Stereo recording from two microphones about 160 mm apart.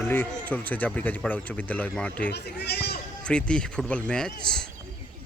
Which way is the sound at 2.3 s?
90° left.